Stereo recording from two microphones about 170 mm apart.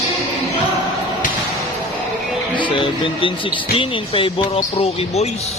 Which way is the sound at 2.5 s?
30° left (ahead or behind).